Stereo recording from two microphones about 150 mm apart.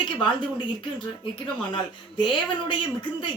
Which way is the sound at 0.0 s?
35° left (ahead or behind).